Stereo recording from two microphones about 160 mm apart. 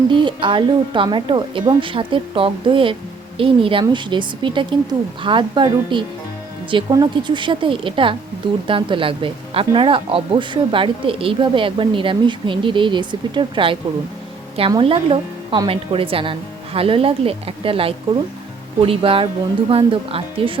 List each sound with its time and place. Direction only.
0.1 s speech: 30° right (ahead or behind)